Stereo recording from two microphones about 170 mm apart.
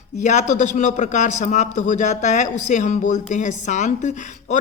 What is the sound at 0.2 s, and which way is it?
A man's voice, 45° left (ahead or behind).